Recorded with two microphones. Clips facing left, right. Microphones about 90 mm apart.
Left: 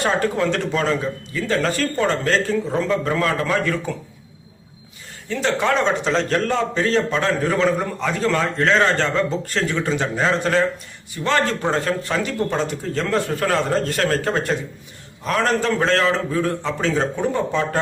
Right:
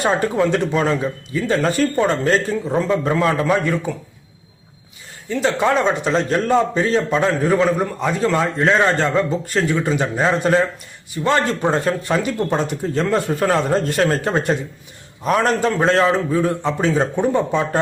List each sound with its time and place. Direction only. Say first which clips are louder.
0.0 s speech: right 2 dB; 20° right (ahead or behind)
5.3 s speech: right 2 dB; 15° right (ahead or behind)